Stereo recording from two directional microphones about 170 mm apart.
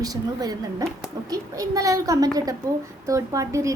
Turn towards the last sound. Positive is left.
turn(degrees=-20)  # may be behind; listen again after turning